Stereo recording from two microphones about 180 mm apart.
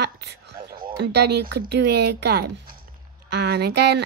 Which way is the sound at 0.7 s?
55° right (ahead or behind).